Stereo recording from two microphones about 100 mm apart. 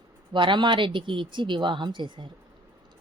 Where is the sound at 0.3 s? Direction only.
50° right (ahead or behind).